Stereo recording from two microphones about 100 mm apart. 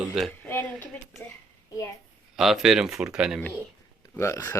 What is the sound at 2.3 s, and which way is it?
Speech, 5° right (ahead or behind).